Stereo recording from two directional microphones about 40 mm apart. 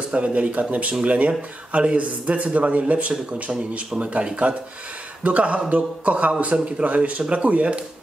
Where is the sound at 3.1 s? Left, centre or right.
Right.